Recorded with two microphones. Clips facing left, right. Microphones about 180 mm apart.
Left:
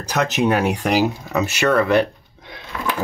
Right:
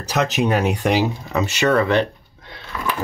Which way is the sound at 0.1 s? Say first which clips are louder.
Left 1 dB; centre (ahead or behind).